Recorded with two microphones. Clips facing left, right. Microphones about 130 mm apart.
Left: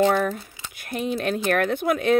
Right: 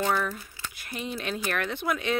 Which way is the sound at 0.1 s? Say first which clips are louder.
Left 5 dB; 55° left (ahead or behind).